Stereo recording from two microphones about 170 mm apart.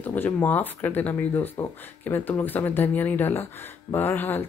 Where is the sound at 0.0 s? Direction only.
10° left (ahead or behind).